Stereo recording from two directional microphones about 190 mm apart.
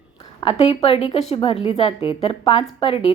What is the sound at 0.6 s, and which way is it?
A woman's voice, 30° left (ahead or behind).